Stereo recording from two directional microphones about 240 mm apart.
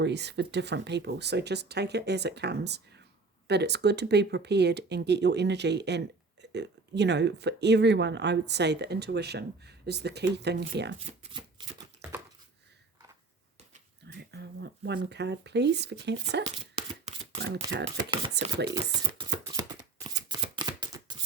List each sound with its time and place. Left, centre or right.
0.0 s speech: right
11.0 s speech: right
14.1 s speech: right
17.7 s speech: right
18.7 s speech: centre
20.1 s shuffling cards: centre